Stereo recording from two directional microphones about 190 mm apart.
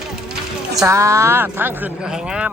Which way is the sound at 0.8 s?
15° right (ahead or behind).